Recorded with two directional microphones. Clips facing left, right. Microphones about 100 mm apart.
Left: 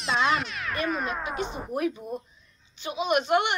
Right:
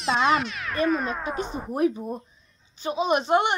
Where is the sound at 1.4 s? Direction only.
35° right (ahead or behind).